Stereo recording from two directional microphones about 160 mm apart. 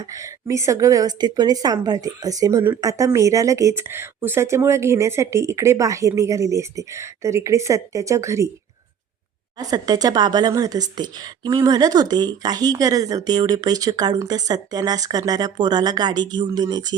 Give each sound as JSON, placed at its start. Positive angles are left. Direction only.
{"t": 0.0, "sound": "a woman's voice", "side_deg": -20}
{"t": 9.6, "sound": "a woman's voice", "side_deg": -25}